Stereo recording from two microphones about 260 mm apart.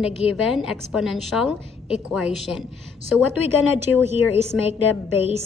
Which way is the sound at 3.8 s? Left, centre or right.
Centre.